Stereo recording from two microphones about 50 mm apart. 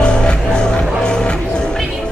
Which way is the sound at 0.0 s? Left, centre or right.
Centre.